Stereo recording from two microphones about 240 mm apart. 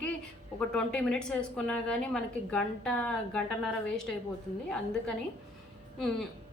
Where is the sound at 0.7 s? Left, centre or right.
Centre.